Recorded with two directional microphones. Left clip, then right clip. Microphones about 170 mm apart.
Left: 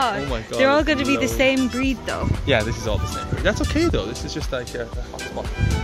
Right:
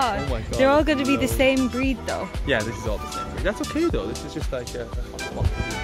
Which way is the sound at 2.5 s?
30° left (ahead or behind).